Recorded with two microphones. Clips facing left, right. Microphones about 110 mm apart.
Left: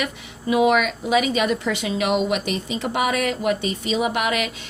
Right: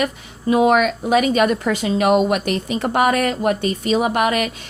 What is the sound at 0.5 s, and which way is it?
A woman's voice, 40° right (ahead or behind).